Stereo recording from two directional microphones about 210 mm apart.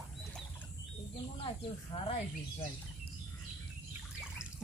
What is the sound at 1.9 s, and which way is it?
Speech, 30° left (ahead or behind).